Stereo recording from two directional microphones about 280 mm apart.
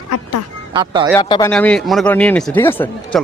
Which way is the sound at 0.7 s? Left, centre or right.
Centre.